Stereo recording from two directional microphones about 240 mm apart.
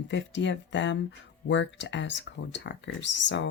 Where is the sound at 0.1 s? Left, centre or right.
Left.